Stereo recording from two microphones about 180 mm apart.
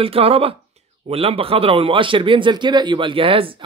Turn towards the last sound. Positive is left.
turn(degrees=-30)  # may be behind; listen again after turning